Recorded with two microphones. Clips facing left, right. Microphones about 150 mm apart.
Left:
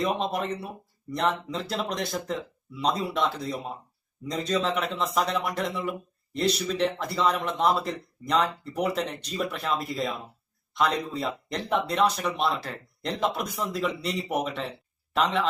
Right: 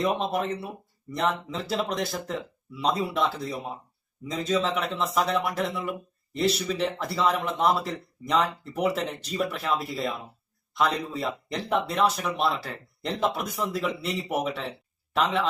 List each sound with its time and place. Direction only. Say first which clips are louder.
0.0 s speech: right 1 dB; centre (ahead or behind)